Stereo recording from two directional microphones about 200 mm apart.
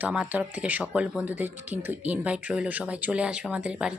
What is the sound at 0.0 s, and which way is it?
A woman's voice, 5° right (ahead or behind).